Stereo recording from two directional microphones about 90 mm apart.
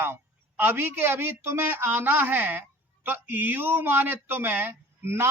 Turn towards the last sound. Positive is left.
turn(degrees=-25)  # may be behind; listen again after turning